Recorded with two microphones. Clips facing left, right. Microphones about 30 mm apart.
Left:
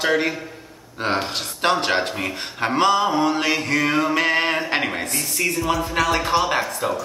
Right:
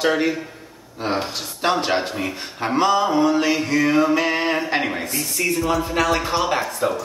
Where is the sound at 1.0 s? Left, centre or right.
Left.